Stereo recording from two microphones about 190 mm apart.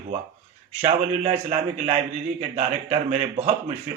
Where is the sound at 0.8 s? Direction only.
35° right (ahead or behind).